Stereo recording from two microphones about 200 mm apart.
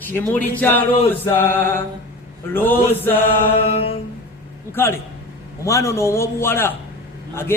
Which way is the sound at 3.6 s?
30° left (ahead or behind).